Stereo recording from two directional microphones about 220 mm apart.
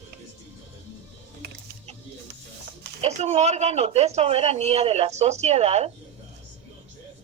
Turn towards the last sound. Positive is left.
turn(degrees=-30)  # may be behind; listen again after turning